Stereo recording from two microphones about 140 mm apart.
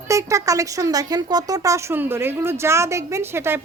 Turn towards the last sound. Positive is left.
turn(degrees=-20)  # may be behind; listen again after turning